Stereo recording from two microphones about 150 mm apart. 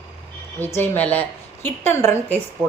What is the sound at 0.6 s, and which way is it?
Speech, 15° left (ahead or behind).